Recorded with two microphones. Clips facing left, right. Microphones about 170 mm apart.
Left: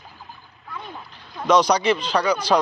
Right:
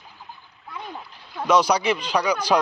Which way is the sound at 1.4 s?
10° right (ahead or behind).